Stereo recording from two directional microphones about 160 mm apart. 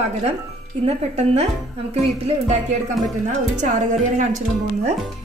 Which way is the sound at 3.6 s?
50° right (ahead or behind).